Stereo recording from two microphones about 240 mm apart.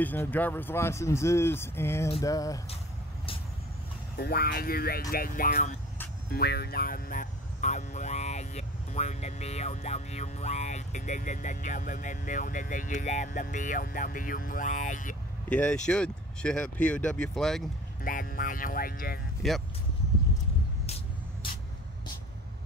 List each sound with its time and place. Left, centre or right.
0.0 s speech: centre
4.2 s speech: left
15.5 s speech: centre
18.0 s speech: left
19.4 s speech: centre